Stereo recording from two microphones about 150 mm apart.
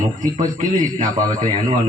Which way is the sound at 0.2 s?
55° right (ahead or behind).